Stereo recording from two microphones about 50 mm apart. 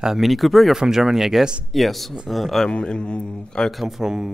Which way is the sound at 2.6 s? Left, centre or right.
Centre.